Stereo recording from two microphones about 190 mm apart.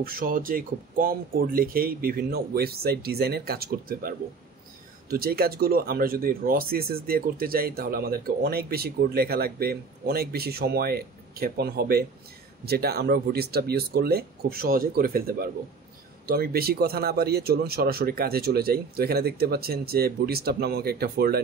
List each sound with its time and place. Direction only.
0.0 s speech: 50° right (ahead or behind)
5.1 s speech: 55° right (ahead or behind)